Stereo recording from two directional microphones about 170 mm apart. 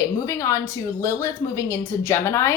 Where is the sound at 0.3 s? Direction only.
15° left (ahead or behind).